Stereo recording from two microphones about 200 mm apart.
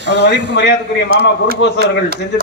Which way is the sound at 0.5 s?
60° left (ahead or behind).